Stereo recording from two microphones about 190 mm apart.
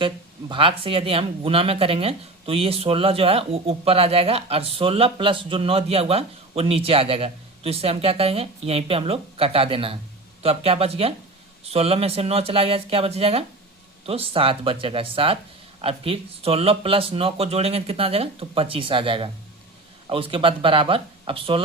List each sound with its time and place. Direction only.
0.0 s speech: 25° right (ahead or behind)